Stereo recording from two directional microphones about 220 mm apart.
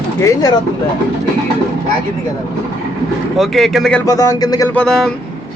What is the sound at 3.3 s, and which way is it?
Speech, centre (ahead or behind).